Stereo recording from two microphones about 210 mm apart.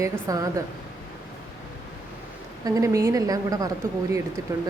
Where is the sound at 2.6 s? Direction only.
15° right (ahead or behind).